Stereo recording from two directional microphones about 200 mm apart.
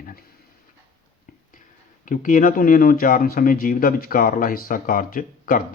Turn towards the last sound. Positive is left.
turn(degrees=45)  # may be behind; listen again after turning